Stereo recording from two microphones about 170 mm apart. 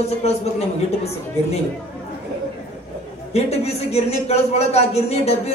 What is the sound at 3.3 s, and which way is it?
A man's voice, 40° left (ahead or behind).